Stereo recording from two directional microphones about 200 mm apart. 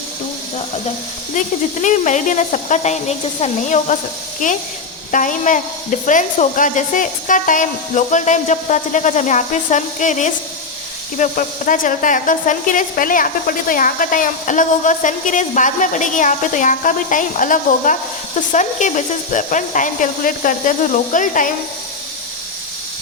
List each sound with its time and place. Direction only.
1.4 s speech: 40° left (ahead or behind)
5.1 s speech: 40° left (ahead or behind)